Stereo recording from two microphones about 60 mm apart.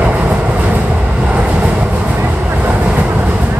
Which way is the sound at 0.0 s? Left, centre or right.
Right.